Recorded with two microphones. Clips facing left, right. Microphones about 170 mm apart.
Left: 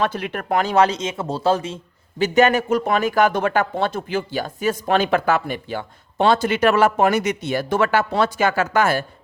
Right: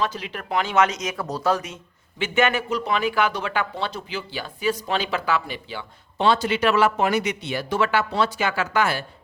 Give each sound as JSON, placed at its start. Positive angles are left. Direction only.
{"t": 0.0, "sound": "speech", "side_deg": 55}